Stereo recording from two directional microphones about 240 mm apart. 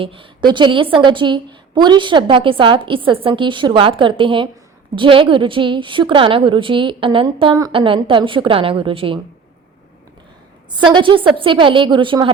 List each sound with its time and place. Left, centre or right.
0.0 s a woman's voice: right
10.7 s a woman's voice: centre